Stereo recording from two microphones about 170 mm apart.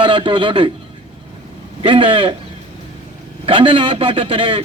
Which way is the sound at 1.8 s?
30° right (ahead or behind).